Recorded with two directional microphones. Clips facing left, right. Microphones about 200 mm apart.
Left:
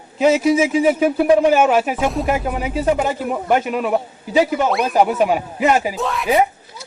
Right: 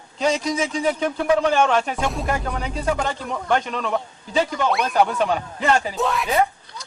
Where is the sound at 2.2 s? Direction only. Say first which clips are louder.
Left 5 dB; 15° left (ahead or behind).